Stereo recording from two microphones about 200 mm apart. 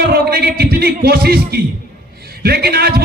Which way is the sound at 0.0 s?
50° right (ahead or behind).